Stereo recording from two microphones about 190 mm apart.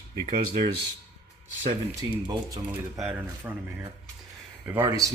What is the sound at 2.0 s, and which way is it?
Speech, 20° right (ahead or behind).